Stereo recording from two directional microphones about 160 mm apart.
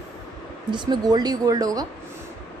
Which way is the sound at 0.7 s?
30° right (ahead or behind).